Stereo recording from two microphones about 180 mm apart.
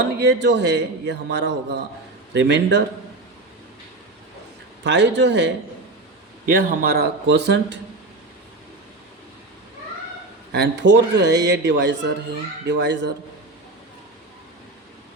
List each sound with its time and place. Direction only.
0.0 s speech: 70° right (ahead or behind)
4.8 s speech: 75° right (ahead or behind)
6.5 s a man's voice: 55° right (ahead or behind); by 7.8 s 70° right (ahead or behind)
10.5 s speech: 75° right (ahead or behind)